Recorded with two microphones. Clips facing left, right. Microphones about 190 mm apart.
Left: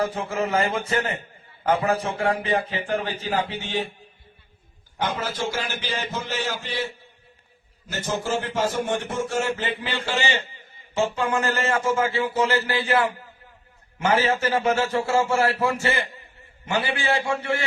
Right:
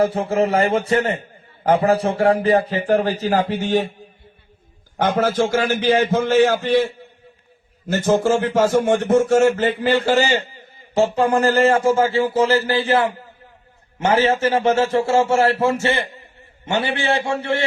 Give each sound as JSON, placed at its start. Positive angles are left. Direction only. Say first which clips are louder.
{"t": 0.0, "sound": "a man's voice", "louder": "right 7 dB", "side_deg": -30}
{"t": 4.9, "sound": "a man's voice", "louder": "right 9 dB", "side_deg": -50}